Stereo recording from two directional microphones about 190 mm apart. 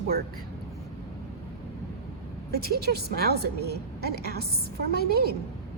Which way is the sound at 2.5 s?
55° right (ahead or behind).